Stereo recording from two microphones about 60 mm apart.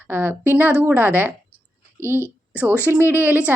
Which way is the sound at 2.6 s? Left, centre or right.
Right.